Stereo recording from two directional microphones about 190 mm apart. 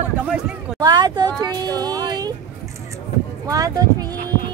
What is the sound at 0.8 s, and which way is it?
Speech, 20° right (ahead or behind).